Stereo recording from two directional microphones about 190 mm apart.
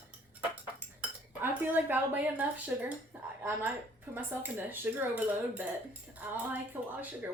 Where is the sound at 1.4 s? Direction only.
10° right (ahead or behind).